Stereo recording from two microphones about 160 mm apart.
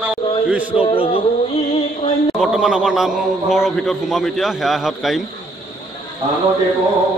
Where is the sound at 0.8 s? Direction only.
35° left (ahead or behind).